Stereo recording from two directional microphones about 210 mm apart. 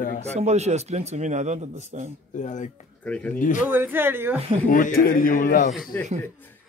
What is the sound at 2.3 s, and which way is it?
Speech, 35° left (ahead or behind).